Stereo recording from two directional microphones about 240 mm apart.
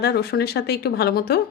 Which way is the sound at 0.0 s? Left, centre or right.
Left.